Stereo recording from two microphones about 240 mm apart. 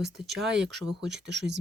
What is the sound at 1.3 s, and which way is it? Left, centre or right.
Speech, right.